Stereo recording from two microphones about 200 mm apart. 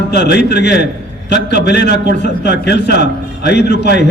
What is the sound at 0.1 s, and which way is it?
A man's voice, 55° left (ahead or behind).